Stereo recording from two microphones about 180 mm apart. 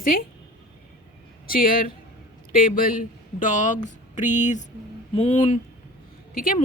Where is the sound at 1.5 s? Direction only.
50° left (ahead or behind).